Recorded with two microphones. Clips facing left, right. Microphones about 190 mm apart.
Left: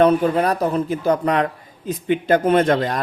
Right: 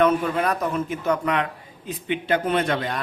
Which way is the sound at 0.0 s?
35° left (ahead or behind).